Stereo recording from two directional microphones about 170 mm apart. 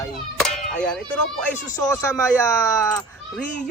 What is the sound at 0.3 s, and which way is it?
Music, 5° left (ahead or behind).